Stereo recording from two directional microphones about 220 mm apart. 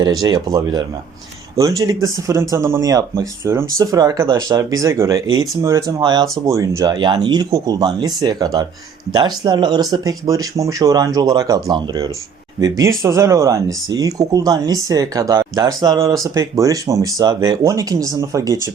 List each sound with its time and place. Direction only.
0.0 s speech: 15° right (ahead or behind)